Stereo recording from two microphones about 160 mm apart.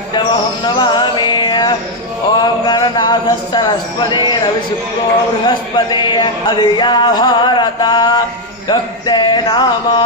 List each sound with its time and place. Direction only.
0.7 s music: 30° left (ahead or behind)
2.4 s speech: 25° left (ahead or behind)
5.4 s speech: 30° left (ahead or behind)